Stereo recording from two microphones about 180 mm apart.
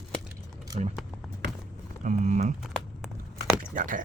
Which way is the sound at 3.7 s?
50° right (ahead or behind).